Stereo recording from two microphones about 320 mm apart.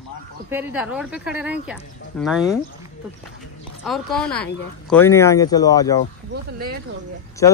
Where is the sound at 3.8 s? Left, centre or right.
Centre.